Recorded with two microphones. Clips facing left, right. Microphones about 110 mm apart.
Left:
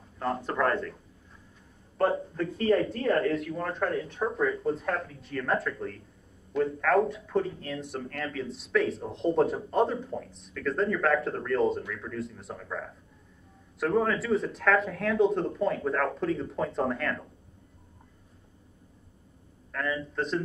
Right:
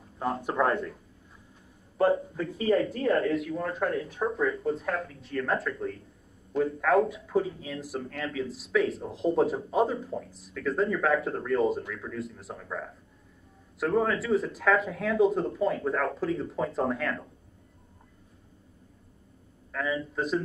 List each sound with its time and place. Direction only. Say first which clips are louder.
0.6 s speech: right 1 dB; 25° right (ahead or behind)
2.0 s speech: right 2 dB; 5° right (ahead or behind)
19.7 s speech: right 1 dB; 5° right (ahead or behind)